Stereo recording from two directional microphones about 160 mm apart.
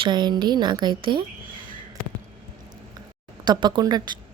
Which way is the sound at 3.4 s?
25° right (ahead or behind).